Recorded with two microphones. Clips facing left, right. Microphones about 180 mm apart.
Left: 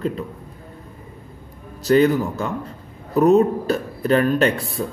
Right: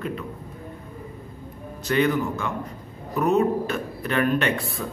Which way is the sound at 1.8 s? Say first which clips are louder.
Left 6 dB; 35° left (ahead or behind).